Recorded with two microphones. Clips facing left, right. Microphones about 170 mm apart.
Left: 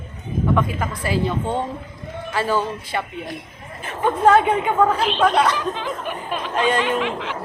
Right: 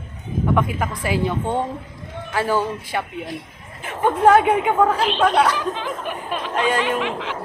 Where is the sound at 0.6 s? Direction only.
15° right (ahead or behind).